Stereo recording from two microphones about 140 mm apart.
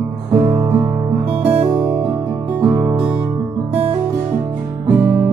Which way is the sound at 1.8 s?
10° right (ahead or behind).